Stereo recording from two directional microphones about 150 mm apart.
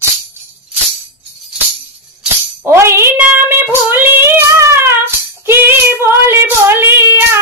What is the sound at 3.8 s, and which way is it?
Child singing, 15° right (ahead or behind).